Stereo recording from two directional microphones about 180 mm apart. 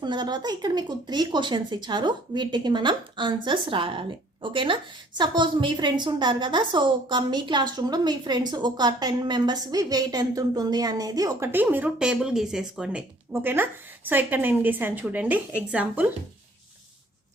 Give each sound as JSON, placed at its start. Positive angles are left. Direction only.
{"t": 0.0, "sound": "a woman's voice", "side_deg": -25}